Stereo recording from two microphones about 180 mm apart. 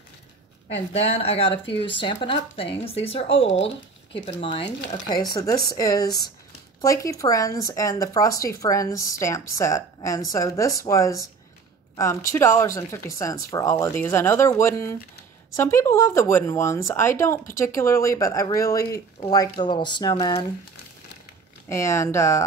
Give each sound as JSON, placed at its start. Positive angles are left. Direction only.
{"t": 0.7, "sound": "speech", "side_deg": 35}
{"t": 21.6, "sound": "speech", "side_deg": 15}